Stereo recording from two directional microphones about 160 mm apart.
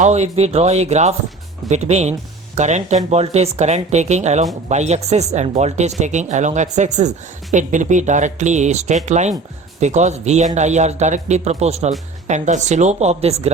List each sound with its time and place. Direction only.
0.0 s speech: 45° right (ahead or behind)